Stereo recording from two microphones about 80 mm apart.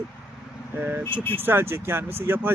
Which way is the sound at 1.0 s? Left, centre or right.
Right.